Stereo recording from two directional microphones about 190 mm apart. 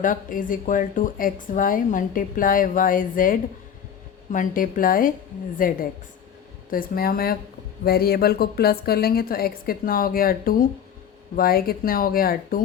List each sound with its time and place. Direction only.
0.0 s speech: 45° left (ahead or behind)